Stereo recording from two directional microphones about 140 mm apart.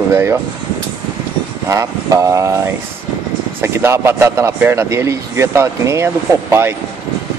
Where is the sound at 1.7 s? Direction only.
20° right (ahead or behind).